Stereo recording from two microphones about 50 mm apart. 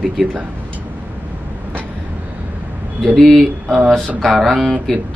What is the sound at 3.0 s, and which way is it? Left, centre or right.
Speech, centre.